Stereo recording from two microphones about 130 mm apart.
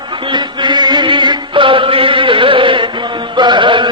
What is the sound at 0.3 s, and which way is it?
Chant, 35° right (ahead or behind).